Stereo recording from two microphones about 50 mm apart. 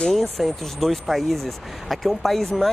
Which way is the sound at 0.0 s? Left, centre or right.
Centre.